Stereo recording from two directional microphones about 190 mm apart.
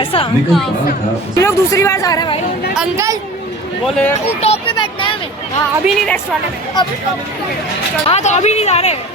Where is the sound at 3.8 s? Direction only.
10° left (ahead or behind).